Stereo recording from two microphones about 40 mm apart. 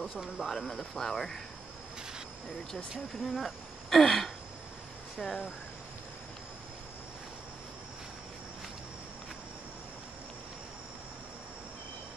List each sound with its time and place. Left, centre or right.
0.4 s speech: centre
3.3 s speech: centre
5.2 s speech: centre